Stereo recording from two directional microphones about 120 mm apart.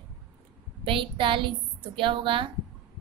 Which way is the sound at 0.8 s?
45° right (ahead or behind).